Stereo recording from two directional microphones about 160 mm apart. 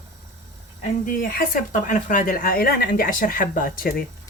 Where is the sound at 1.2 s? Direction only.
65° left (ahead or behind).